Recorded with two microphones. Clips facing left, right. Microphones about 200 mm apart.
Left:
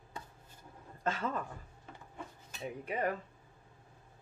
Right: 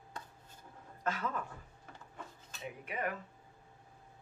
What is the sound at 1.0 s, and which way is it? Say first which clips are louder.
Speech: left 2 dB; 25° left (ahead or behind).